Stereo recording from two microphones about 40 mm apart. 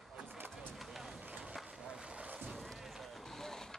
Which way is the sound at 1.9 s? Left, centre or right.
Right.